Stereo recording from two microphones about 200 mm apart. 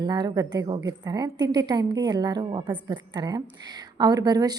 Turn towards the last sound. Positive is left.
turn(degrees=-20)  # may be behind; listen again after turning